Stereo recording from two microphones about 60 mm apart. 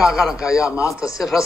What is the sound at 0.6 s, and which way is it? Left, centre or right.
Speech, left.